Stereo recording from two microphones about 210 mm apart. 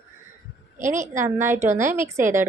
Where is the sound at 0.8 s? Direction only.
35° right (ahead or behind).